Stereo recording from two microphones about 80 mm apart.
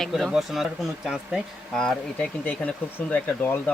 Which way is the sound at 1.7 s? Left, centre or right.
Centre.